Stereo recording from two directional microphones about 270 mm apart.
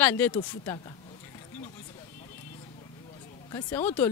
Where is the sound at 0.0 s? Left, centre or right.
Centre.